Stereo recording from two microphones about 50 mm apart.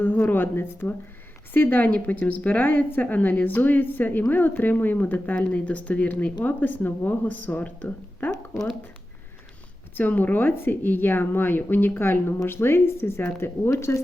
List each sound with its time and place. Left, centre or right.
0.0 s a woman's voice: left
9.9 s speech: left
13.4 s speech: left